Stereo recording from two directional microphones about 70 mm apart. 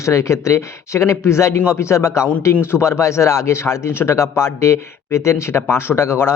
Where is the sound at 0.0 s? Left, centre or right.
Left.